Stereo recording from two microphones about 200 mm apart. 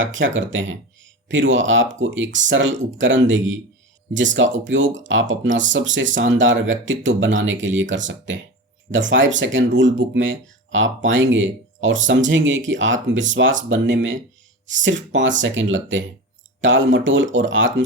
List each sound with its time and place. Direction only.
0.0 s speech: 70° right (ahead or behind)